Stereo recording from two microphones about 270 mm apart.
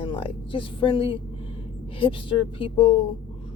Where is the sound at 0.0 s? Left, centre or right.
Centre.